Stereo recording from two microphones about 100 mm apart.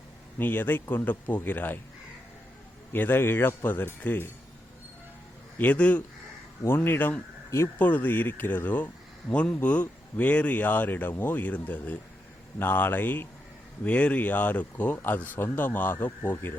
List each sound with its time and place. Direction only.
0.3 s speech: 20° left (ahead or behind)
2.9 s speech: 20° left (ahead or behind)
5.5 s speech: 15° left (ahead or behind)